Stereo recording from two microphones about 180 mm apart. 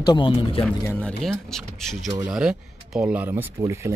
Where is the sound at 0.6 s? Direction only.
10° left (ahead or behind).